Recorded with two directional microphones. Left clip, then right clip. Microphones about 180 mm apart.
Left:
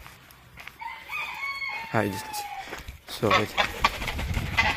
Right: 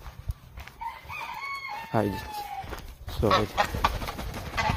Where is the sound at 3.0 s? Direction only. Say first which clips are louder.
Left 1 dB; 15° right (ahead or behind).